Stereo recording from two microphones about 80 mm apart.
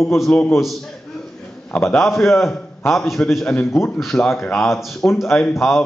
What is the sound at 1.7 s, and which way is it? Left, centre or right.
Speech, left.